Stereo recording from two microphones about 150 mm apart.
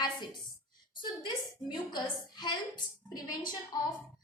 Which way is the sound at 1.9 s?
30° left (ahead or behind).